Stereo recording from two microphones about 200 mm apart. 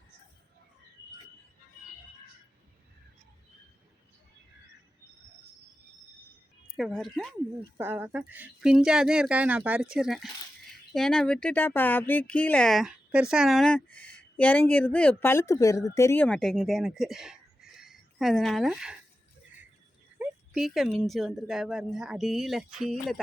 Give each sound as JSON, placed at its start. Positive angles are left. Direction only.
{"t": 6.7, "sound": "speech", "side_deg": 0}
{"t": 7.8, "sound": "speech", "side_deg": -10}
{"t": 20.1, "sound": "speech", "side_deg": -5}